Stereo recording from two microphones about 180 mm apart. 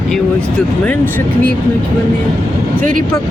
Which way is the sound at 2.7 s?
50° right (ahead or behind).